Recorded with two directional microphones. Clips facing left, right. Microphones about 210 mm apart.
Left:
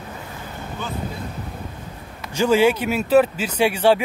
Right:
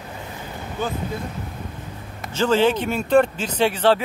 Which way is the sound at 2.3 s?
10° left (ahead or behind).